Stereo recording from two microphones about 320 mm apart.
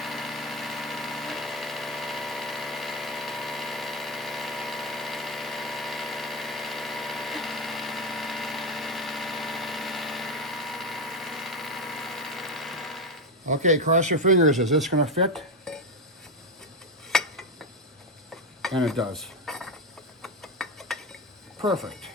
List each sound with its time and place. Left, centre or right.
0.0 s engine: centre
13.5 s speech: right
14.5 s speech: centre
15.0 s speech: centre
15.3 s dishes: centre
17.1 s a sound: centre
18.6 s cutlery: centre
20.2 s a sound: centre
21.7 s speech: centre